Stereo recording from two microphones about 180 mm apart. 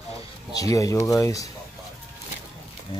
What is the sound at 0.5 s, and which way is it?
Speech, 20° left (ahead or behind).